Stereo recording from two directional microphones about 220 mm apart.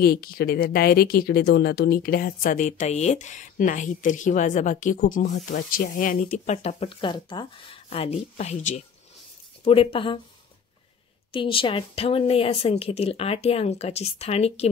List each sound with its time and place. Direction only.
0.0 s speech: 45° left (ahead or behind); by 10.2 s 25° left (ahead or behind)
11.3 s speech: 25° left (ahead or behind)